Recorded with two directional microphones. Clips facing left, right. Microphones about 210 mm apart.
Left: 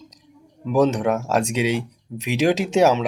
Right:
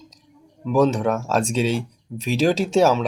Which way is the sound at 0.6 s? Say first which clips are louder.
Even; 15° left (ahead or behind).